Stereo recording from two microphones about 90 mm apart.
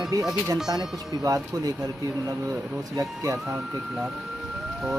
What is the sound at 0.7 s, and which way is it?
Speech, 45° right (ahead or behind).